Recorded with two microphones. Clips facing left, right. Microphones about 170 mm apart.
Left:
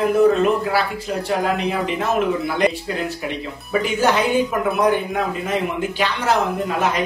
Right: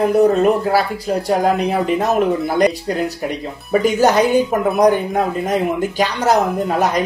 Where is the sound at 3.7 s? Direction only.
40° right (ahead or behind).